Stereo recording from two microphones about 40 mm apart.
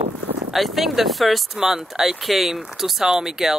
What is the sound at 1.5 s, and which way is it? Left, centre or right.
Speech, centre.